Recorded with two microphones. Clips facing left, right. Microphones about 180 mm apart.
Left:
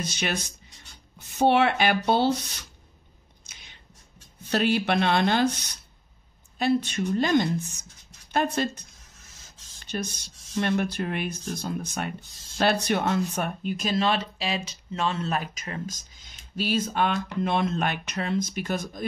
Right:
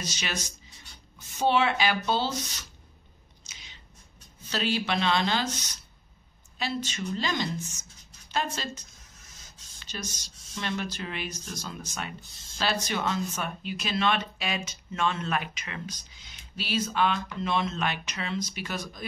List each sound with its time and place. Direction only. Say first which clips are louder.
0.0 s speech: left 5 dB; 55° left (ahead or behind)
3.4 s a sound: even; 55° left (ahead or behind)
4.4 s speech: left 6 dB; 60° left (ahead or behind)